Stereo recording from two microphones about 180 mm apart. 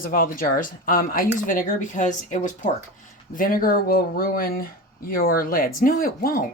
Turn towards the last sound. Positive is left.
turn(degrees=55)  # may be behind; listen again after turning